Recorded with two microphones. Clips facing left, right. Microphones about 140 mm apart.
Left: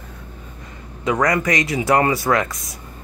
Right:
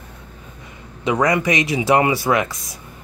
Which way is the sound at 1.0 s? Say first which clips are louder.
Right 1 dB; 10° right (ahead or behind).